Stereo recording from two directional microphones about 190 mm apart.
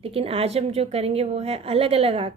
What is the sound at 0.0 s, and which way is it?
A woman's voice, 30° right (ahead or behind).